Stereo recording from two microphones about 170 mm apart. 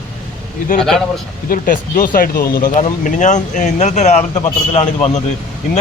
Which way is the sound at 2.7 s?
45° left (ahead or behind).